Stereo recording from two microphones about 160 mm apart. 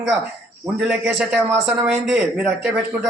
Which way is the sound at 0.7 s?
5° right (ahead or behind).